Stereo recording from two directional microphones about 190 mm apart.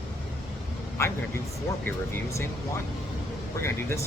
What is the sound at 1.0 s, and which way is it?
Speech, 15° left (ahead or behind).